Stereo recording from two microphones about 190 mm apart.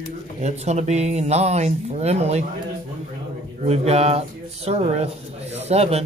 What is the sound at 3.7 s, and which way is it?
Speech, 35° right (ahead or behind).